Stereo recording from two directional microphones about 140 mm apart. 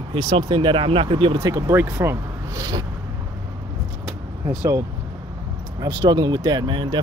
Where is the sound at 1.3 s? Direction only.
20° right (ahead or behind).